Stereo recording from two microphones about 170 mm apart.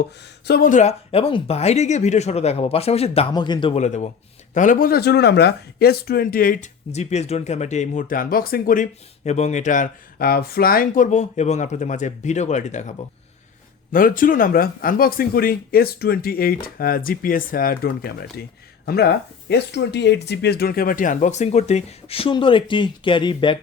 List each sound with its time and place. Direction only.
0.2 s speech: 70° left (ahead or behind)
0.7 s speech: 40° left (ahead or behind)
3.3 s speech: 25° left (ahead or behind)
3.8 s speech: 45° left (ahead or behind)
13.9 s speech: 55° left (ahead or behind); by 23.6 s 30° left (ahead or behind)